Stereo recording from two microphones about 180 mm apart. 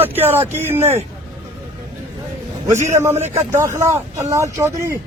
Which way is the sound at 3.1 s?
40° right (ahead or behind).